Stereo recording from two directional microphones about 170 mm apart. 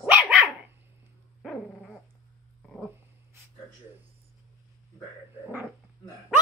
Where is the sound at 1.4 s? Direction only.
Centre (ahead or behind).